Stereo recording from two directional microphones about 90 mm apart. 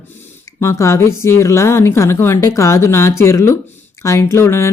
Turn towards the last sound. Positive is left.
turn(degrees=30)  # may be behind; listen again after turning